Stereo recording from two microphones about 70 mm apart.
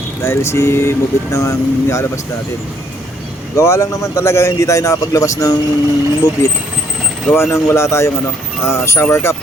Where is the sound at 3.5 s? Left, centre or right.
Left.